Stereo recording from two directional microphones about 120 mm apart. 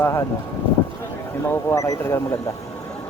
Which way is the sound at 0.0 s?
25° left (ahead or behind).